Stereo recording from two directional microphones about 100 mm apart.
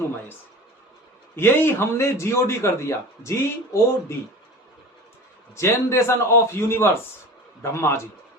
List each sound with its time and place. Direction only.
1.4 s a man's voice: 25° left (ahead or behind)
5.5 s a man's voice: 25° left (ahead or behind)